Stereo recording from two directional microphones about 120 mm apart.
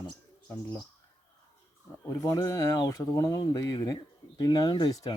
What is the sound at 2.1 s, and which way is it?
Speech, 25° left (ahead or behind).